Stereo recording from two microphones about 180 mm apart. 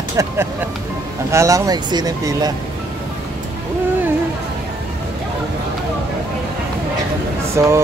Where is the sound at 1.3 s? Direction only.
15° right (ahead or behind).